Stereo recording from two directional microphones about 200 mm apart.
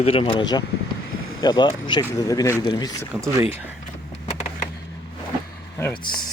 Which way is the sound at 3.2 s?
15° right (ahead or behind).